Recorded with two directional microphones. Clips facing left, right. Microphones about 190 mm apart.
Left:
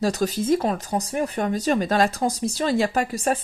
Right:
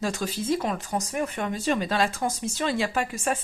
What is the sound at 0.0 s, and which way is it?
Speech, 40° left (ahead or behind).